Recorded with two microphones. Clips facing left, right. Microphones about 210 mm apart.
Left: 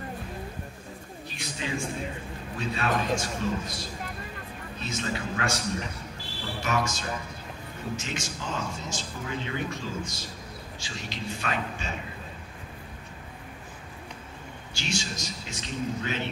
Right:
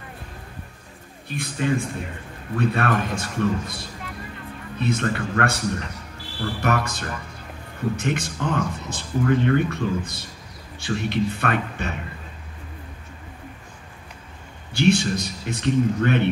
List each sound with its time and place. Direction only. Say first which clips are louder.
1.3 s speech: right 10 dB; 55° right (ahead or behind)
14.7 s speech: right 14 dB; 60° right (ahead or behind)